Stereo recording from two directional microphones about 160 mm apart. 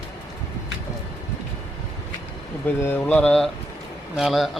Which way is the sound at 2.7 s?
15° left (ahead or behind).